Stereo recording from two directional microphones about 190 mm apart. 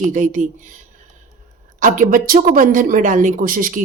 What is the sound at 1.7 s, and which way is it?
Speech, 45° right (ahead or behind).